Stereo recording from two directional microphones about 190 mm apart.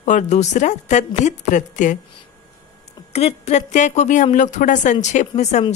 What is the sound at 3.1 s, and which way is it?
A woman's voice, 35° left (ahead or behind).